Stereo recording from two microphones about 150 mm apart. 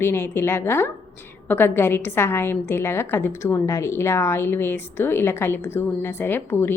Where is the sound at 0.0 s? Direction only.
15° left (ahead or behind).